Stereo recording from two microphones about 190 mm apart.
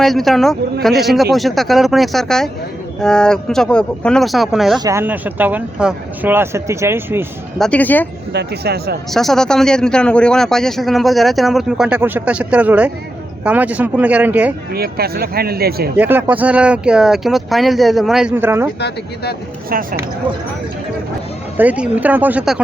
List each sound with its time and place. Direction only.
0.0 s speech: centre (ahead or behind)
4.8 s speech: 15° right (ahead or behind)
7.6 s speech: 5° left (ahead or behind)
8.3 s speech: 60° right (ahead or behind)
9.1 s speech: centre (ahead or behind)
14.7 s speech: 55° right (ahead or behind)
16.0 s speech: 10° right (ahead or behind)
18.8 s speech: 60° left (ahead or behind)
19.7 s speech: 50° right (ahead or behind)
21.6 s speech: 10° right (ahead or behind)